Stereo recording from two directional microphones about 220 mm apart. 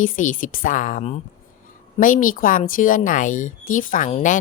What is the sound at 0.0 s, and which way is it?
A woman's voice, 35° left (ahead or behind).